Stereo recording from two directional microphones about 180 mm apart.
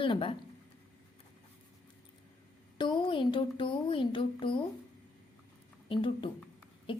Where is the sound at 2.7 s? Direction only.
25° left (ahead or behind).